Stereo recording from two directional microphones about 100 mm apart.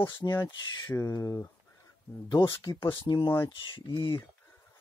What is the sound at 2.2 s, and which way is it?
Speech, 50° left (ahead or behind).